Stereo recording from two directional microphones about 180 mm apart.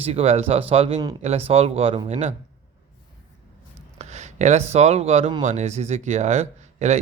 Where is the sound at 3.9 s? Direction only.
40° right (ahead or behind).